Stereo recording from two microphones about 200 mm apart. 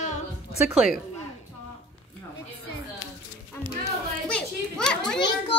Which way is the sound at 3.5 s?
10° left (ahead or behind).